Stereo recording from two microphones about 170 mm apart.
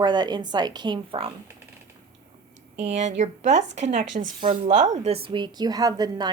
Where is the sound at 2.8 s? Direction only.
40° right (ahead or behind).